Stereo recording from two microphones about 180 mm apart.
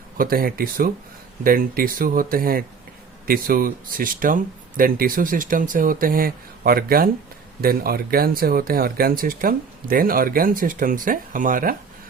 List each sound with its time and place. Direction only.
0.2 s speech: 55° right (ahead or behind)